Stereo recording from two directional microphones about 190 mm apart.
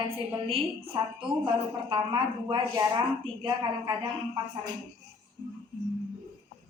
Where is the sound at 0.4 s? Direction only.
30° right (ahead or behind).